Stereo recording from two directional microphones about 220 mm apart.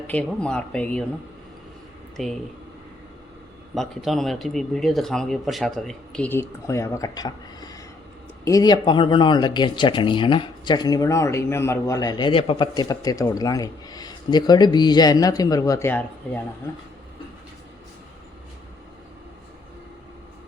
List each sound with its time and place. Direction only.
0.1 s speech: 5° left (ahead or behind)
2.2 s speech: centre (ahead or behind)
3.8 s speech: centre (ahead or behind)